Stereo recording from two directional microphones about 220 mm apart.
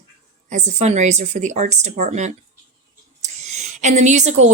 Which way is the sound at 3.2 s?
30° right (ahead or behind).